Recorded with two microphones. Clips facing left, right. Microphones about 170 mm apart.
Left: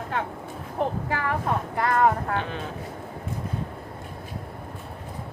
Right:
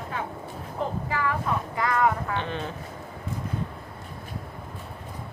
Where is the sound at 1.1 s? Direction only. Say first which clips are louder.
Left 1 dB; 55° left (ahead or behind).